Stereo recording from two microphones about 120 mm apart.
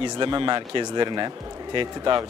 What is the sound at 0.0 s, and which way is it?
Speech, 40° right (ahead or behind).